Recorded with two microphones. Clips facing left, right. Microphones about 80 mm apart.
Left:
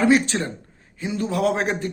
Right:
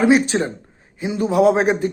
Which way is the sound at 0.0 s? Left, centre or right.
Centre.